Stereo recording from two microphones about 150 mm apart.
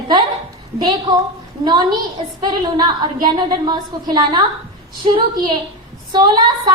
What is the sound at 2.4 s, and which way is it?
A woman's voice, 30° right (ahead or behind).